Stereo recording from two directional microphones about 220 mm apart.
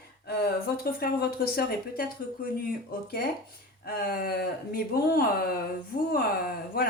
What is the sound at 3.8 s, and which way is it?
Speech, 45° left (ahead or behind).